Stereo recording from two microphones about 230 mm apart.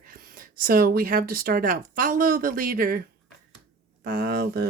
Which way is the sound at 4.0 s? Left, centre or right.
Right.